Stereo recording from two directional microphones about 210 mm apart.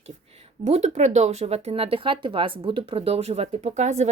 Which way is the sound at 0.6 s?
30° right (ahead or behind).